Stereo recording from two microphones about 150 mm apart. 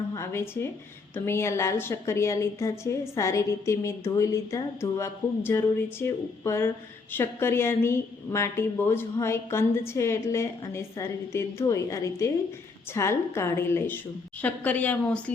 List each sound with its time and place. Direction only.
0.1 s a woman's voice: 15° left (ahead or behind)